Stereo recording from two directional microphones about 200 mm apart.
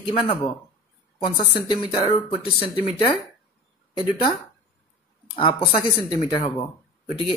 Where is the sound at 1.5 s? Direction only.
25° left (ahead or behind).